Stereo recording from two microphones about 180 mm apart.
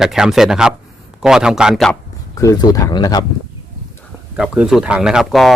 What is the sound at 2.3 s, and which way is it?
Speech, 20° left (ahead or behind).